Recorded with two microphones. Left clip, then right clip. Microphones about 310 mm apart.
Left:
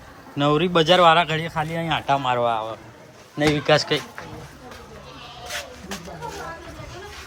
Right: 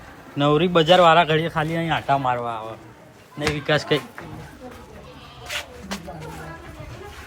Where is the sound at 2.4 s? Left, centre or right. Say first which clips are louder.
Left 6 dB; left.